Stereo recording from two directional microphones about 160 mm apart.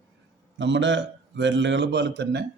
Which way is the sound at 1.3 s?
90° right.